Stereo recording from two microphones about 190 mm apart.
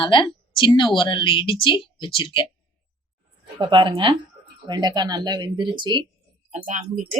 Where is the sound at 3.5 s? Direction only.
25° right (ahead or behind).